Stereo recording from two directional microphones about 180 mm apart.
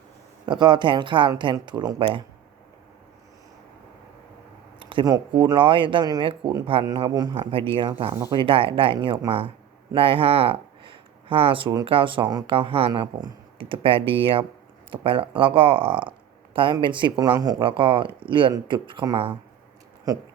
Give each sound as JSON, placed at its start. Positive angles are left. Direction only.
{"t": 0.4, "sound": "speech", "side_deg": -25}
{"t": 4.8, "sound": "speech", "side_deg": -30}
{"t": 8.1, "sound": "speech", "side_deg": -15}
{"t": 8.4, "sound": "speech", "side_deg": -30}